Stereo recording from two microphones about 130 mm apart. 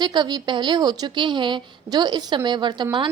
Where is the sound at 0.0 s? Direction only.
35° right (ahead or behind).